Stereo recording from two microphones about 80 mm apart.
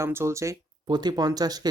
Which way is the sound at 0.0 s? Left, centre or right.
Right.